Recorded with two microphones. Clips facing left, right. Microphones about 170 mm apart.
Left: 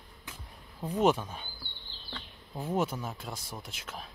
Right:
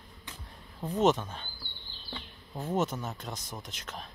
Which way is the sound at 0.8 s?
10° left (ahead or behind).